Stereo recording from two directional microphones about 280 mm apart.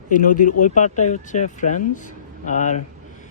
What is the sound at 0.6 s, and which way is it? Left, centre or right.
Speech, left.